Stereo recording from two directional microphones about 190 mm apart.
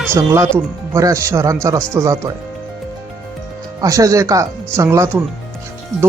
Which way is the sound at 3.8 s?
20° right (ahead or behind).